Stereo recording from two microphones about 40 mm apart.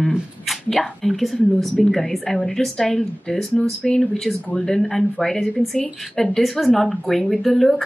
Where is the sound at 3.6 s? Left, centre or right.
Left.